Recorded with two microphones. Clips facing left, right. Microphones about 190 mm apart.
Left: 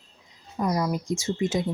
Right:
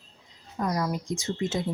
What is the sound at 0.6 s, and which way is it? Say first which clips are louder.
Speech: left 3 dB; 15° left (ahead or behind).